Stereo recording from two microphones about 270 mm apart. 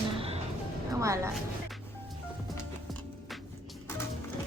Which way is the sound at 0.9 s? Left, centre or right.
Centre.